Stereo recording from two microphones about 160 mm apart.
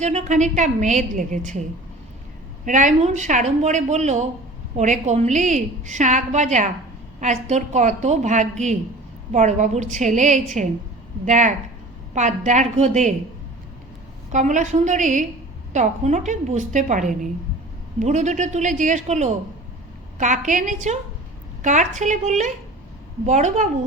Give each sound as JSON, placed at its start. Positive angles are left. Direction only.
{"t": 0.0, "sound": "a woman's voice", "side_deg": -45}
{"t": 2.6, "sound": "a woman's voice", "side_deg": -50}
{"t": 14.3, "sound": "a woman's voice", "side_deg": -50}